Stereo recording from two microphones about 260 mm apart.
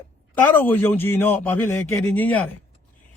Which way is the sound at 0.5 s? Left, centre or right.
Centre.